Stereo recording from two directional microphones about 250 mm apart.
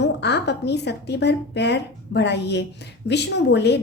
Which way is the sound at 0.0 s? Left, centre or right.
Left.